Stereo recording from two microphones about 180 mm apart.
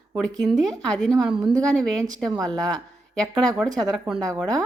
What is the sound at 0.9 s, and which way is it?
Speech, centre (ahead or behind).